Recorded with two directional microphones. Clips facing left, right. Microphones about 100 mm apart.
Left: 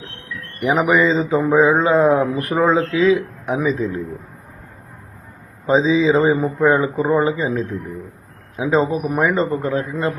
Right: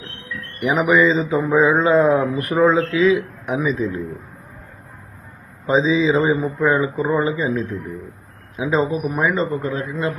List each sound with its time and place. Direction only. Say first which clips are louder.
0.6 s a man's voice: even; 30° left (ahead or behind)
1.5 s mantra: even; 30° left (ahead or behind)
2.4 s a man's voice: right 1 dB; 30° left (ahead or behind)
5.6 s a man's voice: left 2 dB; 30° left (ahead or behind)
6.4 s a man's voice: left 2 dB; 50° left (ahead or behind)
7.0 s a man's voice: left 2 dB; 35° left (ahead or behind)
8.5 s mantra: left 2 dB; 30° left (ahead or behind)
9.6 s a man's voice: left 2 dB; 35° left (ahead or behind)